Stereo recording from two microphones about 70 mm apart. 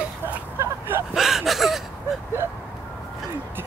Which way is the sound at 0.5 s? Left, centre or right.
Right.